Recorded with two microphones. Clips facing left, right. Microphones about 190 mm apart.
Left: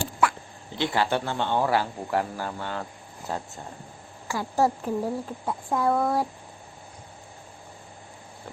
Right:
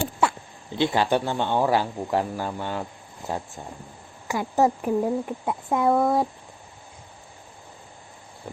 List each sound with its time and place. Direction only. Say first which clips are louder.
0.8 s speech: right 3 dB; 15° right (ahead or behind)